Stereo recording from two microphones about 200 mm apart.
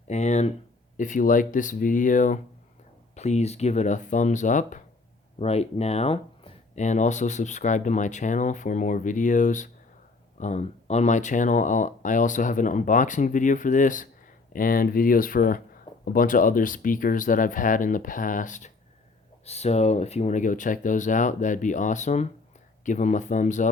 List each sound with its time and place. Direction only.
0.1 s speech: 35° left (ahead or behind)